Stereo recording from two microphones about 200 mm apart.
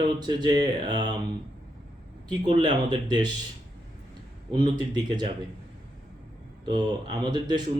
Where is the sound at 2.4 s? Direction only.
25° right (ahead or behind).